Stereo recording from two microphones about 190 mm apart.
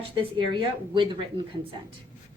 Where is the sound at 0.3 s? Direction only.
25° right (ahead or behind).